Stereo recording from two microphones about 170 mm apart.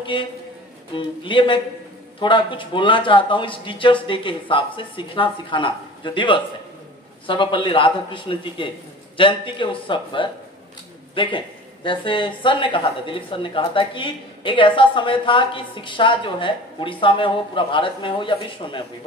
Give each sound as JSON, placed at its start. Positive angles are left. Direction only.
{"t": 0.0, "sound": "speech", "side_deg": 30}